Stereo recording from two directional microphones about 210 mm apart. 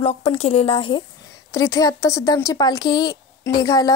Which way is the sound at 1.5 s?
15° left (ahead or behind).